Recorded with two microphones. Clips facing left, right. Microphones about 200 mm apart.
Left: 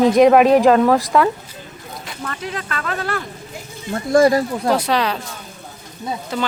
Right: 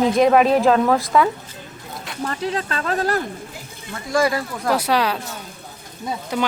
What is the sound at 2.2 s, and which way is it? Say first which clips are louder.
Speech: right 4 dB; 35° right (ahead or behind).